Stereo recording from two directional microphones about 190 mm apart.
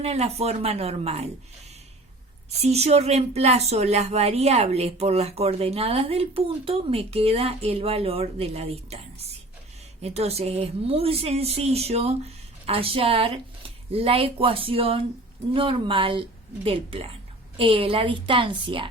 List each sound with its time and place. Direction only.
0.0 s speech: 30° right (ahead or behind)
2.5 s a woman's voice: 35° right (ahead or behind)